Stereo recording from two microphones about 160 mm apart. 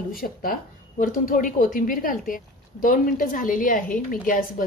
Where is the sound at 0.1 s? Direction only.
60° left (ahead or behind).